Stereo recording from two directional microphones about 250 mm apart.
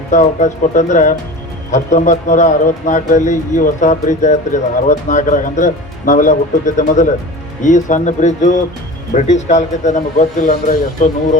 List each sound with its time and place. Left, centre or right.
0.1 s speech: left